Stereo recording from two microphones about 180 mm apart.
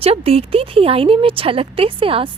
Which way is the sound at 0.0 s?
35° right (ahead or behind).